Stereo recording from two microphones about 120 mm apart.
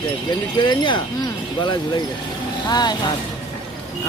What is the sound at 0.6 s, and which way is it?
Speech, 40° left (ahead or behind).